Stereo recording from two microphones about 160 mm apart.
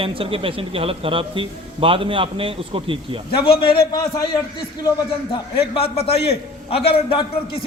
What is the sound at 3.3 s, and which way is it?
A man's voice, 30° left (ahead or behind).